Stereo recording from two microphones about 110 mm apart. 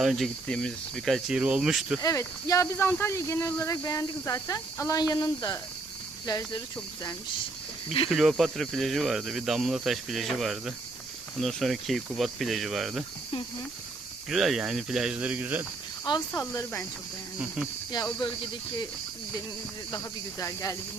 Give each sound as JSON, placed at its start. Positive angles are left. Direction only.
{"t": 0.0, "sound": "speech", "side_deg": -5}
{"t": 0.4, "sound": "speech", "side_deg": 5}
{"t": 1.3, "sound": "speech", "side_deg": -10}
{"t": 2.0, "sound": "speech", "side_deg": 30}
{"t": 8.1, "sound": "speech", "side_deg": 0}
{"t": 14.3, "sound": "speech", "side_deg": 0}
{"t": 16.1, "sound": "speech", "side_deg": 45}
{"t": 17.9, "sound": "speech", "side_deg": 40}
{"t": 19.9, "sound": "speech", "side_deg": 30}